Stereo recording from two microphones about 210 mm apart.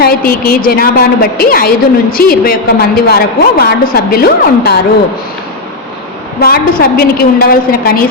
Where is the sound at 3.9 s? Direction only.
45° left (ahead or behind).